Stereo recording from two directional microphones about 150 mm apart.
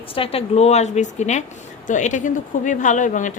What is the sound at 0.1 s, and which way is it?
A woman's voice, 40° left (ahead or behind).